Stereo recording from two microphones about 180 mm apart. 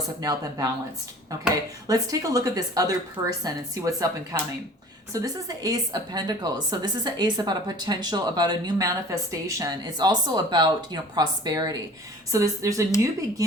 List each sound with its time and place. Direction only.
0.2 s a woman's voice: 20° right (ahead or behind)
1.9 s a woman's voice: 20° right (ahead or behind)